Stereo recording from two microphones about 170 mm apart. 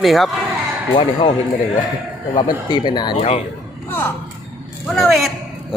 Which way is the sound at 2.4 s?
25° left (ahead or behind).